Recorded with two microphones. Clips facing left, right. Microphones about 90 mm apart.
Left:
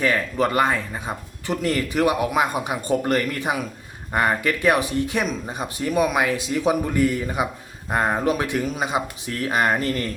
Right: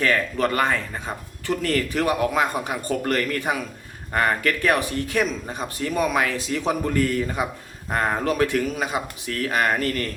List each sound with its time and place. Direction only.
0.0 s speech: 15° left (ahead or behind)